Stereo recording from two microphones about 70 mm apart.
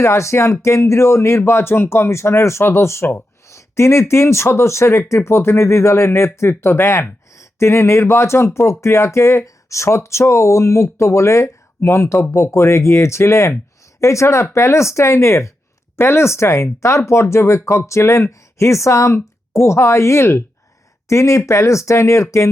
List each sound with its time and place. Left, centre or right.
0.0 s speech: left
11.8 s speech: left